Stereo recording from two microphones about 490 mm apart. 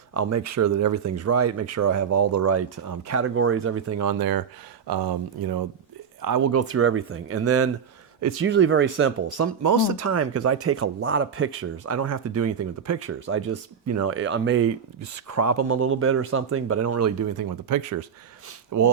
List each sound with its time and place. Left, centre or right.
0.1 s speech: right